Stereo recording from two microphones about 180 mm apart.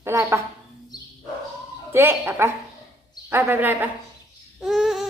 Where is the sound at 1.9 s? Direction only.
15° right (ahead or behind).